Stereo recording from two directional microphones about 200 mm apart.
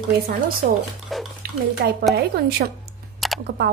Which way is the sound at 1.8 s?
55° right (ahead or behind).